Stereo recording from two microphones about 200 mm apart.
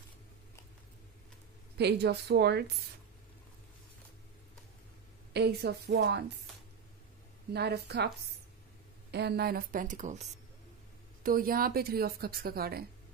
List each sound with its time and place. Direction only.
1.8 s a woman's voice: 55° right (ahead or behind)
5.3 s a woman's voice: 55° right (ahead or behind)
7.5 s a woman's voice: 55° right (ahead or behind)
9.1 s a woman's voice: 55° right (ahead or behind); by 10.2 s 40° right (ahead or behind)
11.2 s a woman's voice: 45° right (ahead or behind)